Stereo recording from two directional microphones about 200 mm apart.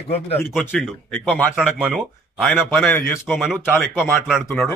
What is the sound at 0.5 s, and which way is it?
Speech, 10° left (ahead or behind).